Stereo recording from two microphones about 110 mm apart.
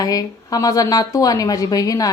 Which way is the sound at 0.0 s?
35° left (ahead or behind).